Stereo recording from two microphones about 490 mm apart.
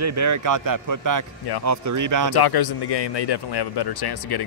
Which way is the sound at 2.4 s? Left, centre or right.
Left.